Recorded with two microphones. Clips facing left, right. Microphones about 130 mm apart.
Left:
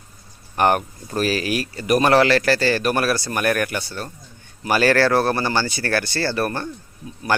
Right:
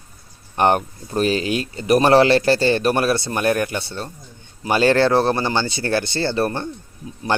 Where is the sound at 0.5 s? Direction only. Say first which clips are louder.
Right 1 dB; 25° right (ahead or behind).